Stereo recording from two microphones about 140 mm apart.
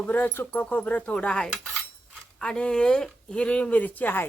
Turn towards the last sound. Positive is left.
turn(degrees=15)  # may be behind; listen again after turning